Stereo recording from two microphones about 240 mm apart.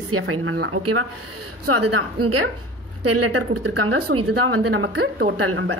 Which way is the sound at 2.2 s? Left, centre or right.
Right.